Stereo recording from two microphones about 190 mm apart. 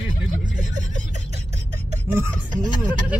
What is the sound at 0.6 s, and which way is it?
Speech, 40° right (ahead or behind).